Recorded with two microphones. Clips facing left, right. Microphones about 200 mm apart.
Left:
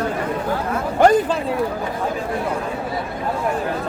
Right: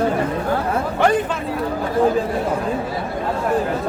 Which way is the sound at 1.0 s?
40° left (ahead or behind).